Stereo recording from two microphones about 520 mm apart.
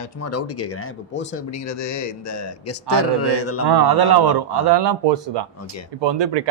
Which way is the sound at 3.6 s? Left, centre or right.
Right.